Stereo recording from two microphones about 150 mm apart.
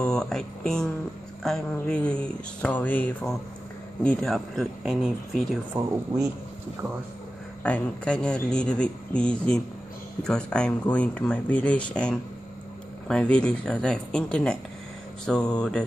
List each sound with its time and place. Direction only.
0.0 s a man's voice: 5° left (ahead or behind)
6.1 s speech: 25° right (ahead or behind)
7.6 s a man's voice: 5° left (ahead or behind)